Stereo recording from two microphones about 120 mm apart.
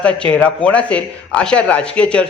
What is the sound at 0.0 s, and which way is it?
Speech, 10° left (ahead or behind).